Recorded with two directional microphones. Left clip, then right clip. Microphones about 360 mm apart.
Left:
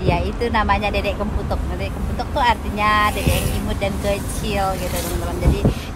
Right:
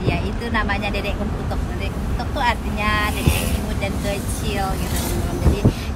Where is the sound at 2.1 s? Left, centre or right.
Centre.